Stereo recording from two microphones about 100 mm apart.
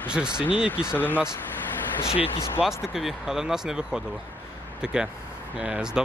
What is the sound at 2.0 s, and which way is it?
Speech, 75° left (ahead or behind).